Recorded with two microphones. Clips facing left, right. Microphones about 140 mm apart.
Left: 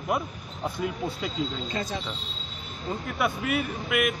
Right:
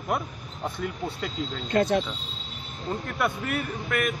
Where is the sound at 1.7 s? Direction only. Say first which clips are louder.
Right 9 dB; 60° right (ahead or behind).